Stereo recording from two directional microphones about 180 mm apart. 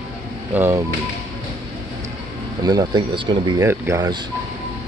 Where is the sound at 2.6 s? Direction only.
20° right (ahead or behind).